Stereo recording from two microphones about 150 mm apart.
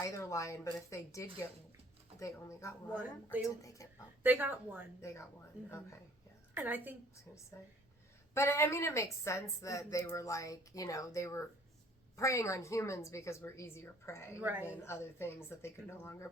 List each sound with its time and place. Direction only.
0.0 s speech: 20° left (ahead or behind)
2.9 s speech: 10° right (ahead or behind)
3.6 s speech: 20° left (ahead or behind)
4.2 s speech: 10° right (ahead or behind)
4.9 s speech: 20° left (ahead or behind)
6.5 s a woman's voice: 10° right (ahead or behind)
7.5 s speech: 20° left (ahead or behind)
14.4 s speech: 10° right (ahead or behind)
14.8 s speech: 15° left (ahead or behind)